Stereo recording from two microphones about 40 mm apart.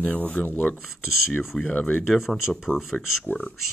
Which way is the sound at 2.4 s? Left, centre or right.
Centre.